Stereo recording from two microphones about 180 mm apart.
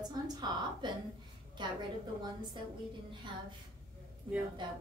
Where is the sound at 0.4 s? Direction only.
25° right (ahead or behind).